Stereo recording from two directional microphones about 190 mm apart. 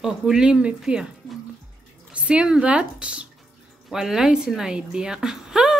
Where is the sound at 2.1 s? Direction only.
5° right (ahead or behind).